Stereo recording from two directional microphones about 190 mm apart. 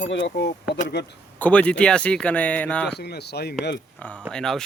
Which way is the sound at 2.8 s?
60° left (ahead or behind).